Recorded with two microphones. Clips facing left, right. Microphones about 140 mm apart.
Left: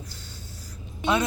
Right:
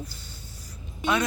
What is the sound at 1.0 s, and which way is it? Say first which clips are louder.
Speech: left 1 dB; 25° left (ahead or behind).